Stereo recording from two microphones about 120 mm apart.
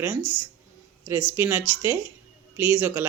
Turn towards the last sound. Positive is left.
turn(degrees=-15)  # may be behind; listen again after turning